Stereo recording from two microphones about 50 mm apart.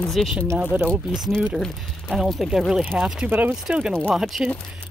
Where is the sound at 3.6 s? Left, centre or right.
Centre.